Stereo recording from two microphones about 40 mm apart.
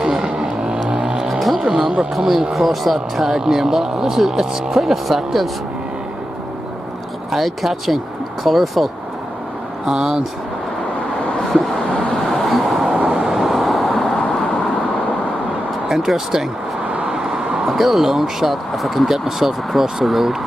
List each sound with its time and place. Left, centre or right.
0.0 s vehicle: centre
1.6 s music: right
2.1 s speech: centre
3.3 s speech: centre
7.2 s speech: centre
9.8 s speech: centre
11.5 s vehicle: centre
15.9 s speech: centre
17.1 s vehicle: centre
17.6 s speech: centre